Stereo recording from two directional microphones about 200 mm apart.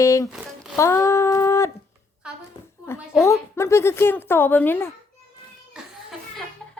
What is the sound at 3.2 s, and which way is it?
A woman's voice, 15° left (ahead or behind).